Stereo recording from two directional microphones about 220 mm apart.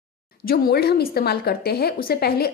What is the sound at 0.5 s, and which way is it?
Speech, 45° left (ahead or behind).